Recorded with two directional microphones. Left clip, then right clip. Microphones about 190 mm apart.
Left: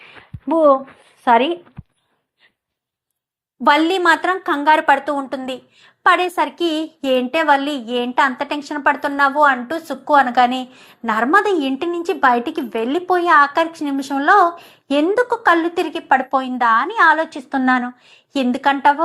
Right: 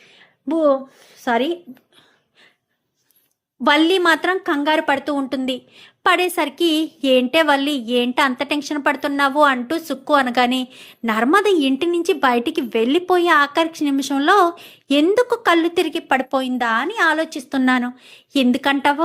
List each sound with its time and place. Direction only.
0.0 s a sound: 30° right (ahead or behind)
1.2 s speech: 30° right (ahead or behind)
3.6 s speech: 35° right (ahead or behind)